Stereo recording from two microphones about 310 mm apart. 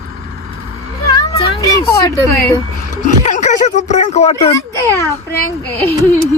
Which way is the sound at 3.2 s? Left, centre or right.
Left.